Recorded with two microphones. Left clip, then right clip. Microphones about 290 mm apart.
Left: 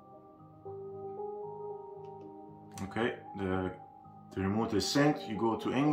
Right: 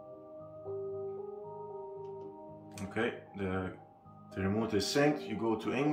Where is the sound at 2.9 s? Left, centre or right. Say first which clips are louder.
Left 1 dB; left.